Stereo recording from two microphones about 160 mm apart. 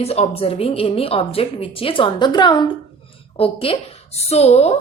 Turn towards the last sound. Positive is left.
turn(degrees=40)  # may be behind; listen again after turning